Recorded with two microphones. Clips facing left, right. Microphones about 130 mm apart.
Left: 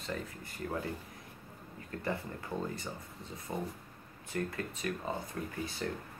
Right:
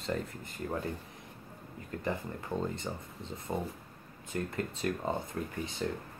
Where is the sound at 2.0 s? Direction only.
20° right (ahead or behind).